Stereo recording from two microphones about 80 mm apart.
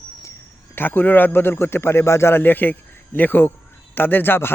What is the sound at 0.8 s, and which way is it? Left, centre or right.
A man's voice, left.